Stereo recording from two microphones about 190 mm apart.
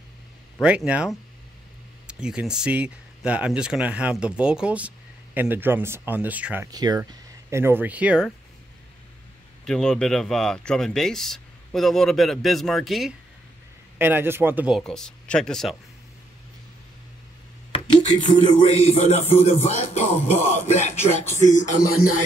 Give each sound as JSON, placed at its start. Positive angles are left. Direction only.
{"t": 0.6, "sound": "speech", "side_deg": -5}
{"t": 9.7, "sound": "speech", "side_deg": 5}
{"t": 13.9, "sound": "speech", "side_deg": -10}
{"t": 14.8, "sound": "speech", "side_deg": 5}
{"t": 17.7, "sound": "speech", "side_deg": 30}